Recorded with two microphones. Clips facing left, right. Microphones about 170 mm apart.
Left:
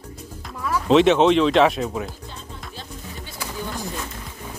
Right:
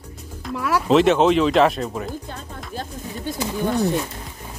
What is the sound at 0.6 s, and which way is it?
Speech, 80° right.